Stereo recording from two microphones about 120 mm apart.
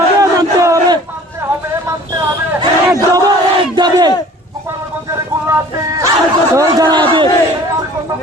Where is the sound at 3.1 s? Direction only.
35° right (ahead or behind).